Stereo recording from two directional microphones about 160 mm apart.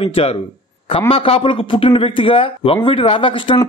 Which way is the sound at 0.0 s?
35° left (ahead or behind).